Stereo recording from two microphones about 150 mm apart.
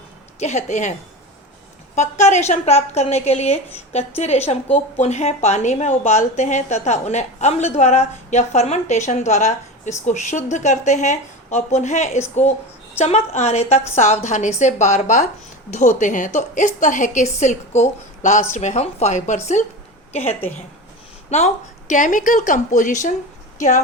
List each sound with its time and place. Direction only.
0.3 s a woman's voice: 50° left (ahead or behind)
2.0 s a woman's voice: 50° left (ahead or behind)
21.2 s speech: 50° left (ahead or behind)